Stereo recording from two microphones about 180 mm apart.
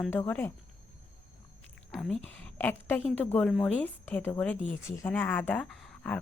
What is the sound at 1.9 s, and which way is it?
Speech, 5° left (ahead or behind).